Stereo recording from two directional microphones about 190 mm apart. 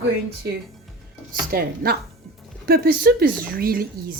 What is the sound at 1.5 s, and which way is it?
Speech, 55° right (ahead or behind).